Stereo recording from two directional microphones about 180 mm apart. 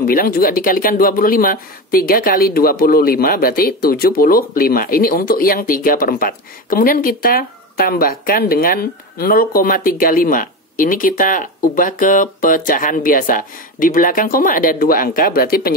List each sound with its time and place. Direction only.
0.0 s speech: 55° left (ahead or behind)